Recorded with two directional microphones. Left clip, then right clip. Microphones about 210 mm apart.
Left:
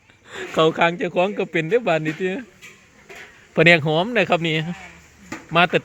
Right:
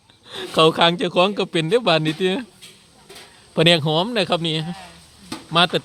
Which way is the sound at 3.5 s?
Centre (ahead or behind).